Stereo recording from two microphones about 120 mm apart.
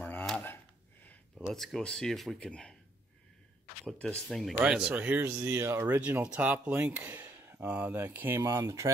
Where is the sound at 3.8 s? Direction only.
Centre (ahead or behind).